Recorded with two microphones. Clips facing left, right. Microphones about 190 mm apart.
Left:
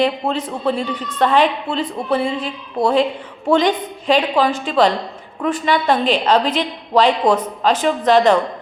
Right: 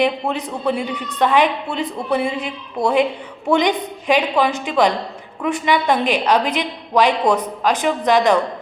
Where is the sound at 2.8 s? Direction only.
Centre (ahead or behind).